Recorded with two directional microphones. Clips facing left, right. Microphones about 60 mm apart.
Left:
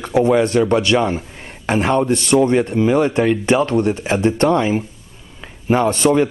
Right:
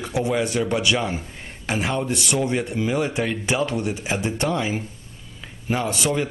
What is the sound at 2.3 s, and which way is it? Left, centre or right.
Speech, left.